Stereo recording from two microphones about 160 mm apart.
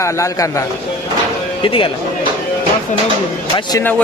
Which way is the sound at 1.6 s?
35° left (ahead or behind).